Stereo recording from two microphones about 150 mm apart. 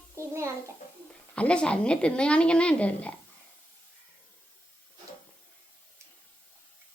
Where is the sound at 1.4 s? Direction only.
5° left (ahead or behind).